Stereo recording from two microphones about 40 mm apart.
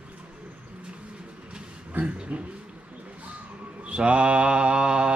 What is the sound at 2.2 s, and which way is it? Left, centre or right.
Speech, right.